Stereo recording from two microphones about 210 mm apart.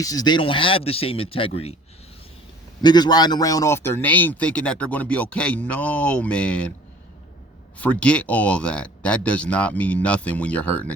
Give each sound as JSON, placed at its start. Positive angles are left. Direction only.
{"t": 0.0, "sound": "speech", "side_deg": 15}
{"t": 2.8, "sound": "speech", "side_deg": 20}
{"t": 7.8, "sound": "speech", "side_deg": 5}